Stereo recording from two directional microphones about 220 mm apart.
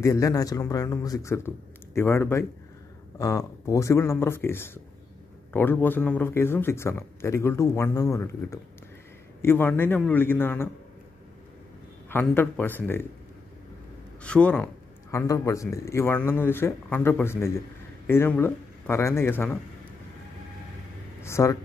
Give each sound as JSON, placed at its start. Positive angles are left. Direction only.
{"t": 0.0, "sound": "a man's voice", "side_deg": 15}
{"t": 12.1, "sound": "a man's voice", "side_deg": 10}
{"t": 14.2, "sound": "a man's voice", "side_deg": 5}
{"t": 21.2, "sound": "speech", "side_deg": 15}